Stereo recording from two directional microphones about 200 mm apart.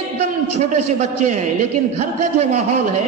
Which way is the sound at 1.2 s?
40° right (ahead or behind).